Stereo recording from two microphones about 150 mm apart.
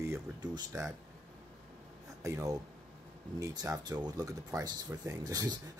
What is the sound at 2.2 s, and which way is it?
Speech, 20° right (ahead or behind).